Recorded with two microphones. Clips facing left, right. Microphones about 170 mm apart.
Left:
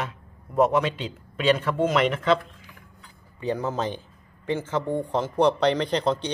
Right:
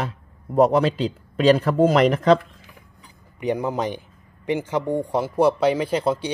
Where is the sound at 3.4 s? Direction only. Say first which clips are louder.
Right 3 dB; 15° right (ahead or behind).